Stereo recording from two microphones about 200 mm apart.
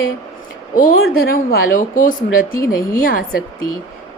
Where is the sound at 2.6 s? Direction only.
15° left (ahead or behind).